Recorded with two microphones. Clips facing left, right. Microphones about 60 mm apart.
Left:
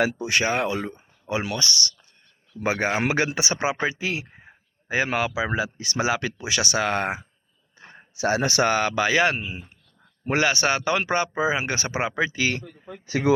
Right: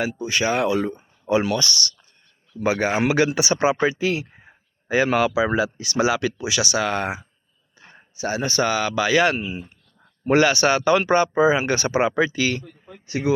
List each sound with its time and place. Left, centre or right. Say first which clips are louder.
0.0 s speech: left 2 dB; left
0.4 s speech: right 4 dB; left
2.6 s speech: right 3 dB; left
7.8 s a sound: left 2 dB; left
8.2 s speech: left 1 dB; left
8.6 s speech: right 1 dB; left
9.0 s speech: right 2 dB; left
13.1 s speech: left 1 dB; left